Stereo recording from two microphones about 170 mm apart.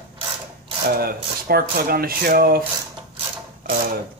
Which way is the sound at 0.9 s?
65° right (ahead or behind).